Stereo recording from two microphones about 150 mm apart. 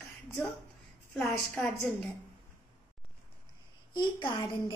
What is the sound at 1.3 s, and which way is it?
Speech, 15° left (ahead or behind).